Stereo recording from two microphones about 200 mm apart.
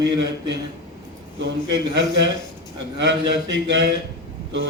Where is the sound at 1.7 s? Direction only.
60° right (ahead or behind).